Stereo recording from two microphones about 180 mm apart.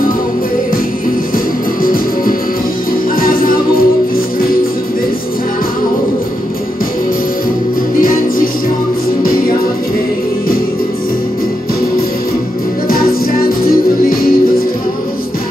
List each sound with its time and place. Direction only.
1.8 s music: 50° left (ahead or behind)
8.0 s music: 55° left (ahead or behind)
12.8 s music: 55° left (ahead or behind)